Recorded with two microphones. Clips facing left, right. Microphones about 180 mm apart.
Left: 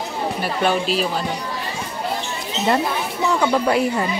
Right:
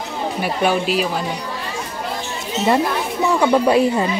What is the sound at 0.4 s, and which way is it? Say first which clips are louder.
Speech: right 2 dB; 10° right (ahead or behind).